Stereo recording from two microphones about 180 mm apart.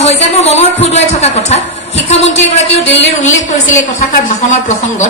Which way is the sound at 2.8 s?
90° left.